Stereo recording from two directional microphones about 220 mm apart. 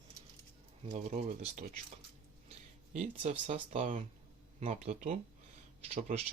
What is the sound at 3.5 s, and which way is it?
Speech, 30° right (ahead or behind).